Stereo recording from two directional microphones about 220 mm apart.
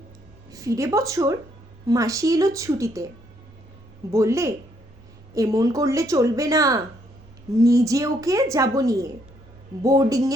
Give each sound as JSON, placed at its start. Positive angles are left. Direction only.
{"t": 0.5, "sound": "a woman's voice", "side_deg": -15}
{"t": 4.1, "sound": "a woman's voice", "side_deg": -15}